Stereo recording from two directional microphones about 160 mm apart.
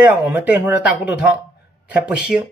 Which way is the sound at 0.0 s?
10° right (ahead or behind).